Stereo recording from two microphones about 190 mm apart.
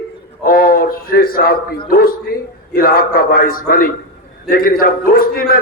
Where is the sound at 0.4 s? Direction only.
50° left (ahead or behind).